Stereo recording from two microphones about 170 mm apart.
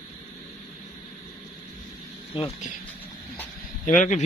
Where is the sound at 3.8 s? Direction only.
50° left (ahead or behind).